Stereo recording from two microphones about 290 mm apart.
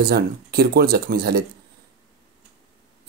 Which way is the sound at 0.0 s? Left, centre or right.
Right.